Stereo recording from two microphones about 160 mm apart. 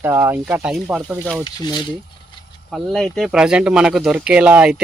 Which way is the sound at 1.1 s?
5° left (ahead or behind).